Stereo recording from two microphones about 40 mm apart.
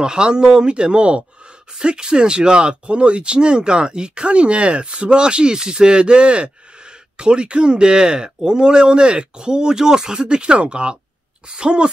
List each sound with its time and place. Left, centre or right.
0.0 s speech: right